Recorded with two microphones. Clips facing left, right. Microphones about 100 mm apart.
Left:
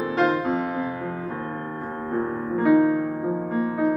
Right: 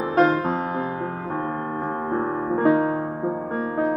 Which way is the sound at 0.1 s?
40° right (ahead or behind).